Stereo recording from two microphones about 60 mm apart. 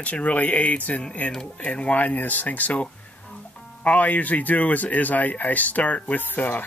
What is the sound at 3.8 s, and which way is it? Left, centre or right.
Speech, left.